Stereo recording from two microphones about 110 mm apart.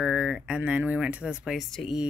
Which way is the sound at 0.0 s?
5° right (ahead or behind).